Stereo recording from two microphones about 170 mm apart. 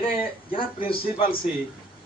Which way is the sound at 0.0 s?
30° left (ahead or behind).